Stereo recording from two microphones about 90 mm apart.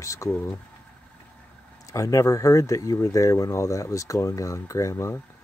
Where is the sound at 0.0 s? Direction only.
35° left (ahead or behind).